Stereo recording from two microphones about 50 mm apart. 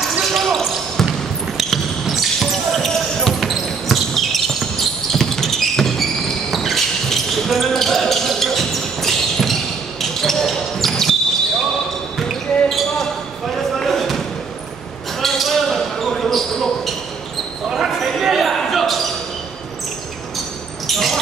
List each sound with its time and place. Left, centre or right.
0.0 s basketball bounce: centre
17.6 s basketball bounce: centre
17.9 s a sound: centre
18.2 s basketball bounce: centre
20.8 s basketball bounce: centre